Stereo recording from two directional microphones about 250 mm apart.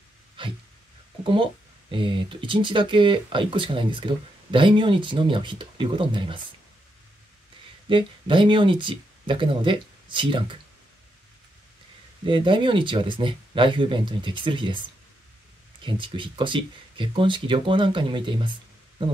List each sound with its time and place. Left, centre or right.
0.4 s a sound: centre
1.2 s speech: right
7.9 s speech: centre
12.3 s speech: centre
15.8 s speech: centre